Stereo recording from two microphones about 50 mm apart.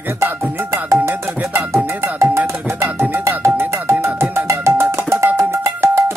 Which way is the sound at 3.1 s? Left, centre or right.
Right.